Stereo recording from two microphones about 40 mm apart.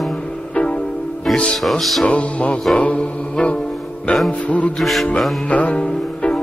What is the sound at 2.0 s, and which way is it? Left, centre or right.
Music, left.